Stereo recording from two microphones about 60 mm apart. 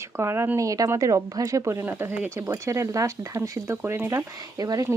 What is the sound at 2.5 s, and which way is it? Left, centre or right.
Speech, right.